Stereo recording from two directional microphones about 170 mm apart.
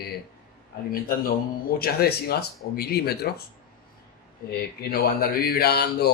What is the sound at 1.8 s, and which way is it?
Speech, 65° left (ahead or behind).